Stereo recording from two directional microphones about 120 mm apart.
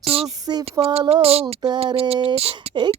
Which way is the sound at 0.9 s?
40° right (ahead or behind).